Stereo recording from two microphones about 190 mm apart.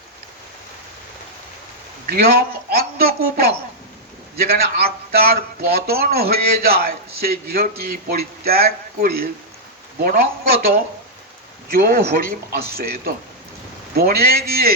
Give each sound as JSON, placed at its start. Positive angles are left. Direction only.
{"t": 2.0, "sound": "a man's voice", "side_deg": -55}
{"t": 11.7, "sound": "a man's voice", "side_deg": -55}